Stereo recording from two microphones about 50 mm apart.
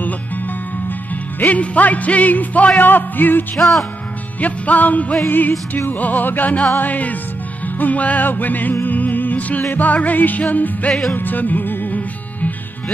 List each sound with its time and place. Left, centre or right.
1.4 s music: left
3.5 s music: centre
4.4 s music: left
10.9 s music: centre
11.1 s music: left